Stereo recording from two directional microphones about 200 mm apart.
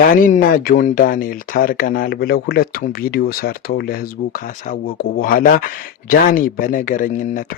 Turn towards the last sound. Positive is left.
turn(degrees=40)  # may be behind; listen again after turning